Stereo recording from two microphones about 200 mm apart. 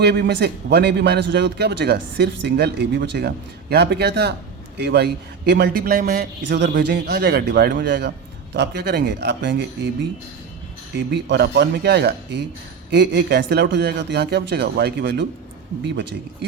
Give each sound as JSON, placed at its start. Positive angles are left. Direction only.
{"t": 0.0, "sound": "a man's voice", "side_deg": -55}
{"t": 10.9, "sound": "a man's voice", "side_deg": -60}